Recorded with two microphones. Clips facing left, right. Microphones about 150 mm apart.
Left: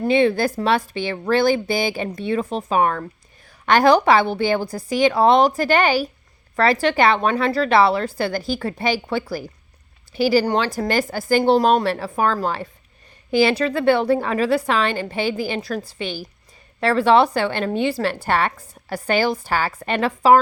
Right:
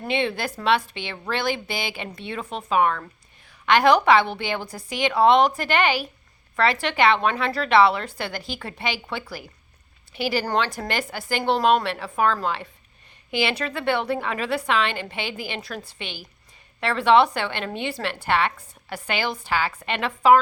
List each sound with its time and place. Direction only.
0.0 s a woman's voice: 35° left (ahead or behind)